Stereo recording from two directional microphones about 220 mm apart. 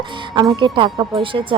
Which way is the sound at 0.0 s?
20° right (ahead or behind).